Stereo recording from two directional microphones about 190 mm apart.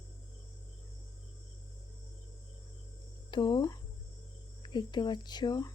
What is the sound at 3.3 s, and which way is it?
Speech, 20° left (ahead or behind).